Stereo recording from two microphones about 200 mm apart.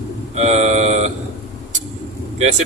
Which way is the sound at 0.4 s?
35° right (ahead or behind).